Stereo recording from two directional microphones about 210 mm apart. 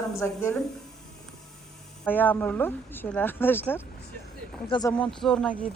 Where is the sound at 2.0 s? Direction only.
10° left (ahead or behind).